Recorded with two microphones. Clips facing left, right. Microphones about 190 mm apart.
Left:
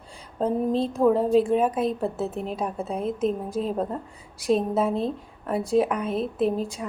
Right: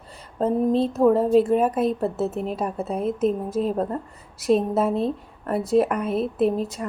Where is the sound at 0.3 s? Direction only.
Centre (ahead or behind).